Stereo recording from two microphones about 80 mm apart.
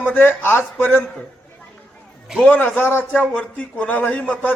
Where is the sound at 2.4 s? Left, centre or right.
Left.